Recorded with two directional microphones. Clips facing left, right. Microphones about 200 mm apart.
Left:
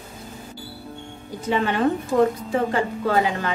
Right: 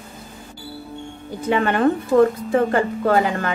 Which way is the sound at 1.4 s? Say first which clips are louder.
Right 3 dB; 55° right (ahead or behind).